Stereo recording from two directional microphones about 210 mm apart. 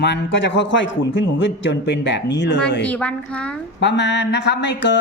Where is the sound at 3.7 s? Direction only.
55° left (ahead or behind).